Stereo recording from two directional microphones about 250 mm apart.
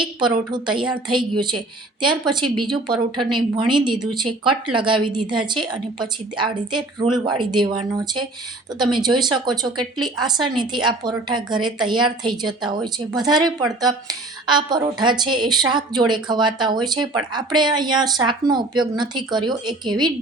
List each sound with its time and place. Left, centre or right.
0.0 s a woman's voice: centre
2.4 s speech: right
2.7 s a woman's voice: centre